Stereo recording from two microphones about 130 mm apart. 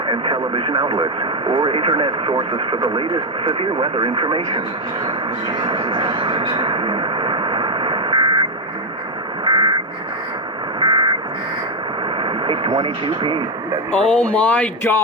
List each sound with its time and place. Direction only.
0.1 s speech: 40° right (ahead or behind)
9.4 s vehicle: 40° right (ahead or behind)
10.8 s a sound: 35° right (ahead or behind)
12.1 s speech: 40° right (ahead or behind)
13.9 s speech: 5° left (ahead or behind)